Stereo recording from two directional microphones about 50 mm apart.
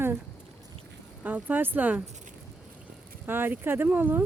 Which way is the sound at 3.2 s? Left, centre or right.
Right.